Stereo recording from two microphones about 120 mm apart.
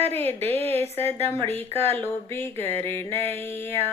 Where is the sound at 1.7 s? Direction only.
55° right (ahead or behind).